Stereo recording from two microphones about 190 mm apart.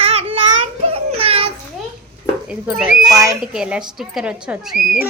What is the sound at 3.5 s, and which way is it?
A woman's voice, 5° right (ahead or behind).